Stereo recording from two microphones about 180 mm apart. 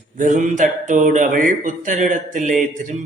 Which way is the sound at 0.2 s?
45° right (ahead or behind).